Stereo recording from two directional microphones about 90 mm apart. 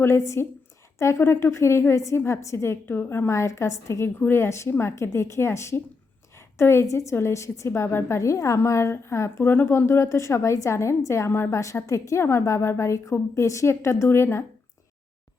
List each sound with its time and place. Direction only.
0.0 s a woman's voice: 30° left (ahead or behind)